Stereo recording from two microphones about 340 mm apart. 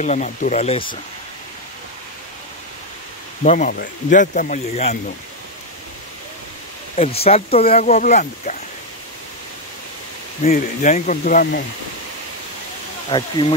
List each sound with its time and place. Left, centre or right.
0.0 s speech: left
3.4 s speech: left
7.0 s speech: centre
10.4 s speech: left
13.1 s speech: centre